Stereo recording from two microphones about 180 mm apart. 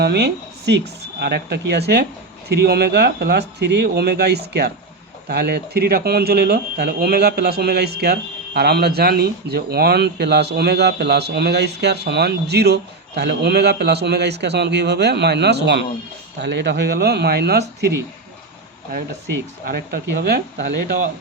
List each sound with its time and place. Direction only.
0.0 s speech: 65° right (ahead or behind)
19.6 s speech: 60° right (ahead or behind)